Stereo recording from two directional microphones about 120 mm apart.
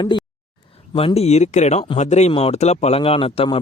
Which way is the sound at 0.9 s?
55° left (ahead or behind).